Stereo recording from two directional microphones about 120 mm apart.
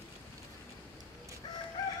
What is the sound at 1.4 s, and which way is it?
Chicken, 40° left (ahead or behind).